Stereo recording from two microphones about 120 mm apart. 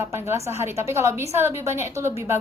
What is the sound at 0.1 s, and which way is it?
A woman's voice, 25° right (ahead or behind).